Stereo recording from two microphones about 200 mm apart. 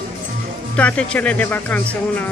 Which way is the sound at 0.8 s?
5° left (ahead or behind).